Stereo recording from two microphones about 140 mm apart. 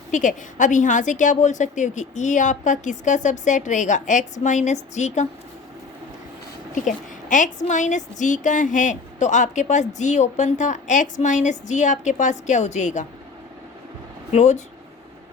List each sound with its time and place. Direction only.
0.1 s a woman's voice: 65° left (ahead or behind)
6.7 s a woman's voice: 65° left (ahead or behind)
14.3 s a woman's voice: 55° left (ahead or behind)